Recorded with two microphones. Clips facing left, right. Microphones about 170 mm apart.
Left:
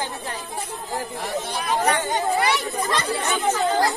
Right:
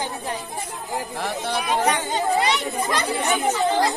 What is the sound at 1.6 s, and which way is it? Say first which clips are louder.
Speech: left 1 dB; 15° right (ahead or behind).